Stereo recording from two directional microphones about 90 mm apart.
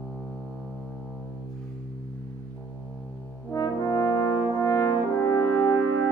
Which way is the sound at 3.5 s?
40° left (ahead or behind).